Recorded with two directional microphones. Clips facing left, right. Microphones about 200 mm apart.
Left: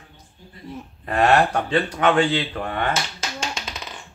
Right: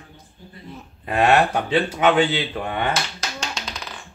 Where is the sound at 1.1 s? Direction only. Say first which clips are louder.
Even; 5° right (ahead or behind).